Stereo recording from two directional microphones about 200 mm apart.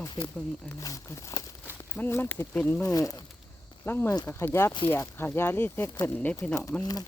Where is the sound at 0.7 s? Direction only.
15° left (ahead or behind).